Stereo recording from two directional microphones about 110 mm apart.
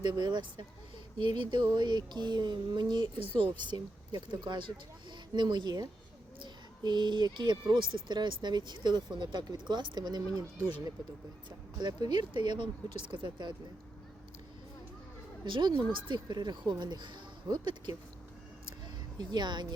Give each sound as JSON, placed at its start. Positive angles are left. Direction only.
{"t": 0.0, "sound": "speech", "side_deg": -40}
{"t": 11.8, "sound": "speech", "side_deg": -40}
{"t": 15.4, "sound": "speech", "side_deg": -50}
{"t": 19.3, "sound": "speech", "side_deg": -40}